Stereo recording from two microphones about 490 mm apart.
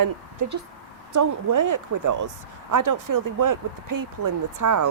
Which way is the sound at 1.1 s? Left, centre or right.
Right.